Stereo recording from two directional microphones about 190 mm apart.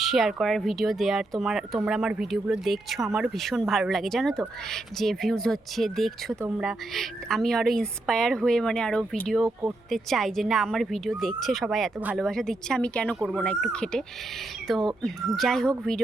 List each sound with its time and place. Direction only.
0.0 s speech: centre (ahead or behind)